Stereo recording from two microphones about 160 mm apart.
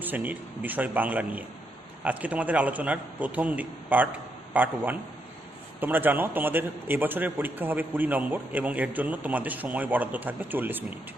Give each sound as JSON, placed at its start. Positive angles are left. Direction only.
{"t": 0.0, "sound": "a man's voice", "side_deg": -10}
{"t": 5.8, "sound": "a man's voice", "side_deg": -10}